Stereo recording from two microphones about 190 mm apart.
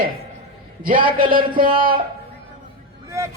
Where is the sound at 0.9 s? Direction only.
25° right (ahead or behind).